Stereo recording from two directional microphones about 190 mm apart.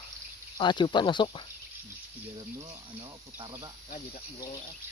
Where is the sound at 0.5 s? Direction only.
25° left (ahead or behind).